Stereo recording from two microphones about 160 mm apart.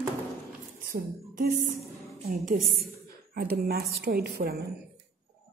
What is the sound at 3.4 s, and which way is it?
A woman's voice, 75° right (ahead or behind).